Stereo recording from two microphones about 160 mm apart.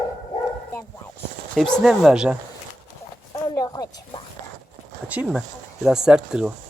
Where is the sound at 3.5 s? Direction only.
20° left (ahead or behind).